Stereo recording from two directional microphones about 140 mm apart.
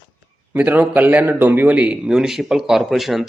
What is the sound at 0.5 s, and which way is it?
A man's voice, 10° right (ahead or behind).